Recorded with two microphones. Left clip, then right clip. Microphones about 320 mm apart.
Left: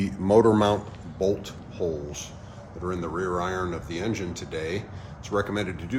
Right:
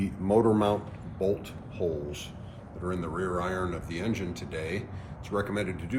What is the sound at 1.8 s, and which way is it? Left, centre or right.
Speech, left.